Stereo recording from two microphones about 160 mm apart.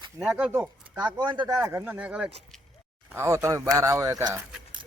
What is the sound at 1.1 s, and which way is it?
Speech, 25° right (ahead or behind).